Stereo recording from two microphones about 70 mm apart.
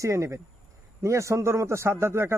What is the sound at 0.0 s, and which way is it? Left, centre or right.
A man's voice, right.